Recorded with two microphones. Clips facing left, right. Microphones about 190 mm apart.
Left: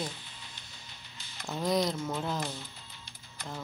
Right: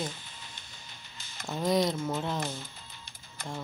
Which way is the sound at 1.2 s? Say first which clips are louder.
Right 1 dB; 45° right (ahead or behind).